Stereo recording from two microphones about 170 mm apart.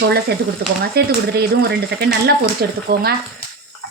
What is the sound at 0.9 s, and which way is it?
Speech, 65° right (ahead or behind).